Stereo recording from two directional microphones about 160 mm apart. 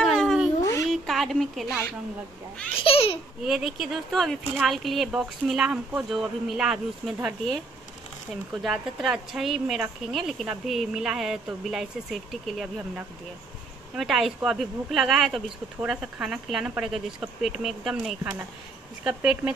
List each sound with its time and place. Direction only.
0.0 s a sound: 5° left (ahead or behind)
2.8 s baby laughter: 35° left (ahead or behind)
3.4 s speech: centre (ahead or behind)
8.6 s speech: centre (ahead or behind)